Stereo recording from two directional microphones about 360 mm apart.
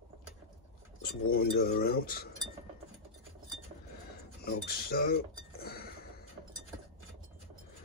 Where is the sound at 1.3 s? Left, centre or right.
Left.